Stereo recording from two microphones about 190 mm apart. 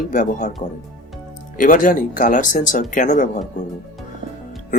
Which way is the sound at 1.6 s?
45° left (ahead or behind).